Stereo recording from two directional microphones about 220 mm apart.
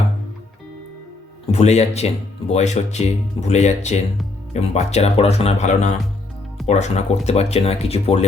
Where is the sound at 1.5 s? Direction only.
30° left (ahead or behind).